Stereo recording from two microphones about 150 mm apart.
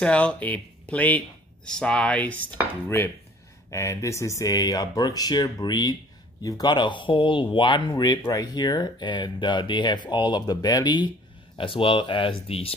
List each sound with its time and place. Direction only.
0.0 s speech: 10° left (ahead or behind); by 12.7 s 40° left (ahead or behind)